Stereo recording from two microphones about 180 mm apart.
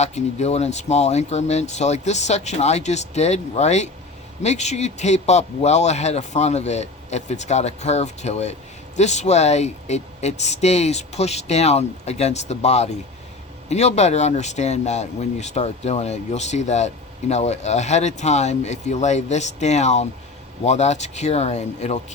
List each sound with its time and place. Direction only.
0.0 s speech: 40° left (ahead or behind)